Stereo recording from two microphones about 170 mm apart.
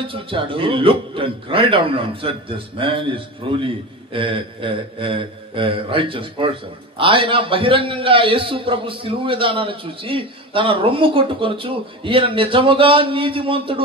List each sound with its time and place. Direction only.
0.0 s a man's voice: 30° right (ahead or behind)